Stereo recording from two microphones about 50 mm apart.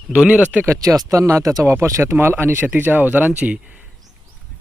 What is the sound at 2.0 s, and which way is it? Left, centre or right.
Speech, right.